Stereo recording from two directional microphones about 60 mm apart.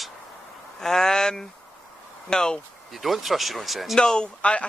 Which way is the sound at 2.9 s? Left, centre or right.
Centre.